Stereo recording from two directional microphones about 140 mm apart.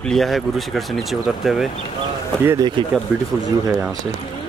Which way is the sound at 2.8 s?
35° right (ahead or behind).